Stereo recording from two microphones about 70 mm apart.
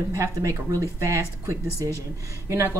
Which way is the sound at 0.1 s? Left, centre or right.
Right.